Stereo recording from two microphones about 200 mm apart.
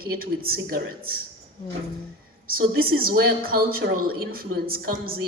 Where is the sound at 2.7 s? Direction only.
45° right (ahead or behind).